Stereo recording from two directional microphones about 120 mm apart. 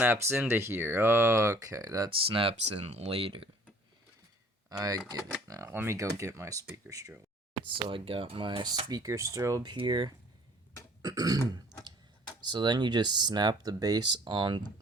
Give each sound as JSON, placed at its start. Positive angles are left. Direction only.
{"t": 0.0, "sound": "speech", "side_deg": -15}
{"t": 2.0, "sound": "speech", "side_deg": -50}
{"t": 4.7, "sound": "speech", "side_deg": -30}
{"t": 5.6, "sound": "speech", "side_deg": -20}
{"t": 7.7, "sound": "speech", "side_deg": -45}
{"t": 9.7, "sound": "speech", "side_deg": -40}
{"t": 12.5, "sound": "speech", "side_deg": -40}